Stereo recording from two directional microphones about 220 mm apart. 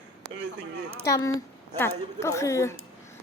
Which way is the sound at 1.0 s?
15° left (ahead or behind).